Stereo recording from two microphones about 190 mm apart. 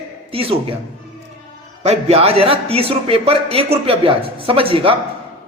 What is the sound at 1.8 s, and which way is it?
A man's voice, 30° right (ahead or behind).